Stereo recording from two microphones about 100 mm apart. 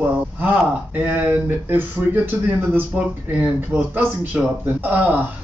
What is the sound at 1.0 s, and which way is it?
Speech, 15° right (ahead or behind).